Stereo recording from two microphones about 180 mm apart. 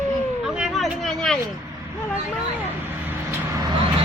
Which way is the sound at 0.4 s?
5° right (ahead or behind).